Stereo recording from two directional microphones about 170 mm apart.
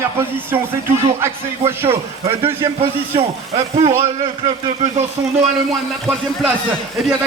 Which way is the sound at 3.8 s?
35° right (ahead or behind).